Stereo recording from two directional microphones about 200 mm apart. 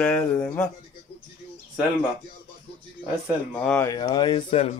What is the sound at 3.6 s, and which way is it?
Speech, 5° left (ahead or behind).